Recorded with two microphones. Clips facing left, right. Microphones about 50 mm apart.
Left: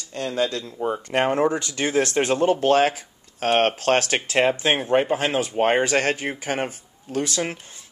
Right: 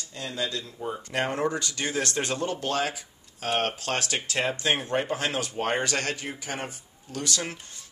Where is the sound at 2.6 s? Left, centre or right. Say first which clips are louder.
Left 10 dB; left.